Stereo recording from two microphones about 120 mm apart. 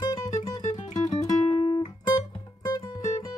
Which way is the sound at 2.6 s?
30° left (ahead or behind).